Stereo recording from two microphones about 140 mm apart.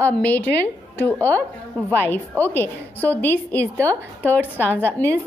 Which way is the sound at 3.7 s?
20° right (ahead or behind).